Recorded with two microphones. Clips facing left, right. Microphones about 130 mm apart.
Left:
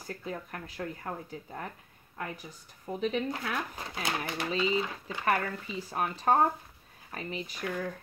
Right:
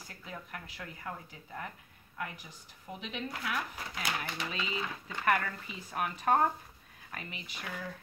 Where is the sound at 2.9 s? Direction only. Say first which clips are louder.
Left 9 dB; 35° left (ahead or behind).